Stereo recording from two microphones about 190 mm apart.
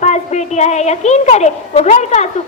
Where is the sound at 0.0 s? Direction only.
35° left (ahead or behind).